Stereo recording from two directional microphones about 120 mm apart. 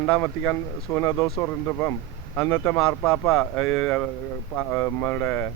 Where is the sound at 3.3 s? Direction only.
Centre (ahead or behind).